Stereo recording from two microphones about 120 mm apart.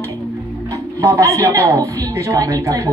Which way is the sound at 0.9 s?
25° right (ahead or behind).